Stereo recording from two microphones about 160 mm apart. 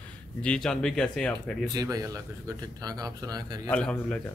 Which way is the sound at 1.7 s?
25° right (ahead or behind).